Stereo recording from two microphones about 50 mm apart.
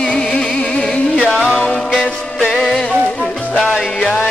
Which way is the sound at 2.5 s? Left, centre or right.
Centre.